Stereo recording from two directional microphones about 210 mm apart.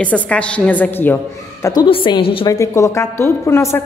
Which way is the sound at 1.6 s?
20° left (ahead or behind).